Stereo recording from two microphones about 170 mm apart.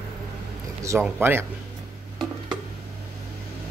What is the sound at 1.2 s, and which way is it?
Speech, 15° right (ahead or behind).